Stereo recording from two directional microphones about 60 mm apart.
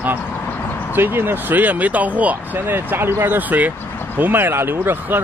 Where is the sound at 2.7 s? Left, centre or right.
Right.